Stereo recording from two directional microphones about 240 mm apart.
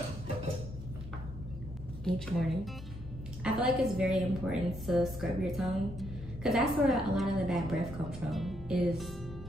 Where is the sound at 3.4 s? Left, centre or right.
Centre.